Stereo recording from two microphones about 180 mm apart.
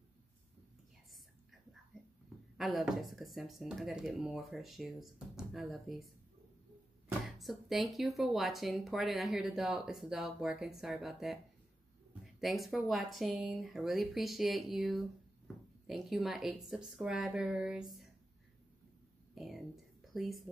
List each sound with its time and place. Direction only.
2.5 s speech: centre (ahead or behind)
7.2 s speech: centre (ahead or behind)
12.4 s speech: centre (ahead or behind)
19.3 s a sound: centre (ahead or behind)